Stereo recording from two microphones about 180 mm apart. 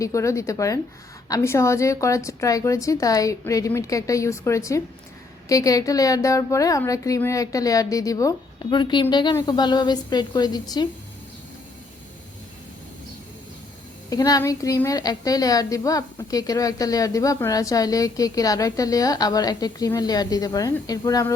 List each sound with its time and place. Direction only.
0.0 s a woman's voice: 15° left (ahead or behind)
14.1 s a woman's voice: 20° left (ahead or behind)